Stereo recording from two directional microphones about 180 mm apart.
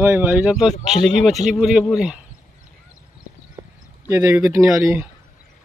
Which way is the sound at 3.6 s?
15° right (ahead or behind).